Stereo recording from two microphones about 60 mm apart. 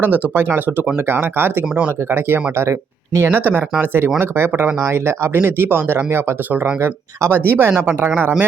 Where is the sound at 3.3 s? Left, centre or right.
Right.